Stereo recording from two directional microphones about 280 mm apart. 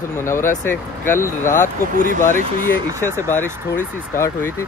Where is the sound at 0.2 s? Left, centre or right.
Centre.